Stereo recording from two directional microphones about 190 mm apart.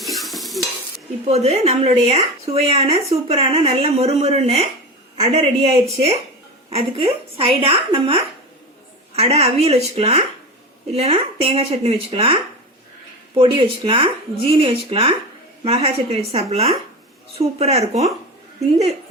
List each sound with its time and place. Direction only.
0.0 s stir: centre (ahead or behind)
1.3 s speech: 35° right (ahead or behind)